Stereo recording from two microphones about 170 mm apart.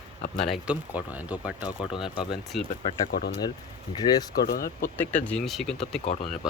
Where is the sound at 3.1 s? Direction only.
65° left (ahead or behind).